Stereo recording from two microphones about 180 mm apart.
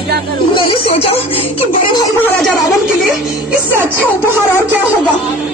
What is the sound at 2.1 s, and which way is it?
Chatter, 10° left (ahead or behind).